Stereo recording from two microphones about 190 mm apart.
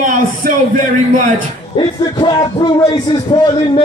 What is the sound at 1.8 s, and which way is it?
A man's voice, 25° left (ahead or behind).